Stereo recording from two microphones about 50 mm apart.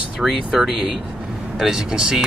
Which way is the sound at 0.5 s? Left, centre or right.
Centre.